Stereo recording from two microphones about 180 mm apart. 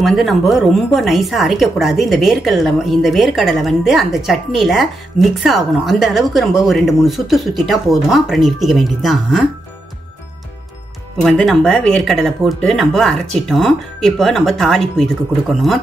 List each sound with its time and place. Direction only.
0.0 s a woman's voice: centre (ahead or behind)
11.1 s a woman's voice: 5° left (ahead or behind)